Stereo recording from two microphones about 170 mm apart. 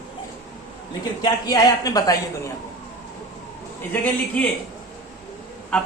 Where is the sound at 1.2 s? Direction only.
20° left (ahead or behind).